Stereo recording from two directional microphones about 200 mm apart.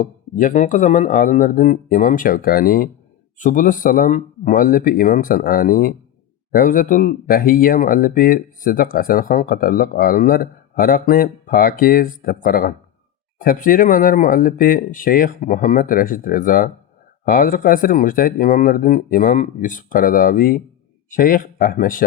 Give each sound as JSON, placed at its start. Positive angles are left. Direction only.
{"t": 0.0, "sound": "speech", "side_deg": 40}